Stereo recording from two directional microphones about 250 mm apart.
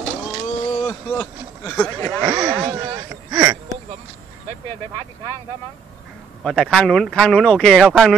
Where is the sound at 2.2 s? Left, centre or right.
Centre.